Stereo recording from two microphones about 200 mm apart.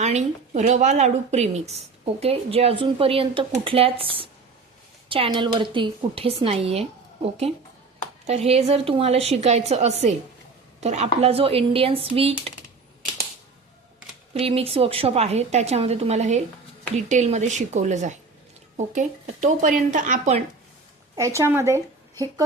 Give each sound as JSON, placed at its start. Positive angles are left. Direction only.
{"t": 0.0, "sound": "a woman's voice", "side_deg": -35}
{"t": 8.3, "sound": "a woman's voice", "side_deg": -30}
{"t": 14.3, "sound": "a woman's voice", "side_deg": -30}
{"t": 21.2, "sound": "a woman's voice", "side_deg": -15}